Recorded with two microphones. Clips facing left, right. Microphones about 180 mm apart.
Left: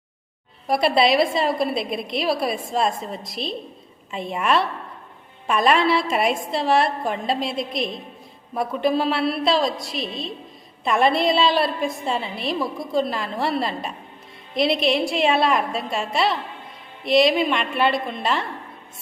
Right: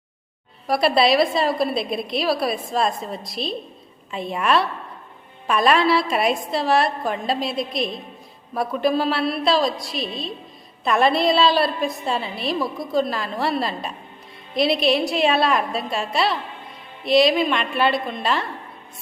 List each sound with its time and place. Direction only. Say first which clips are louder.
0.7 s a woman's voice: right 1 dB; 20° left (ahead or behind)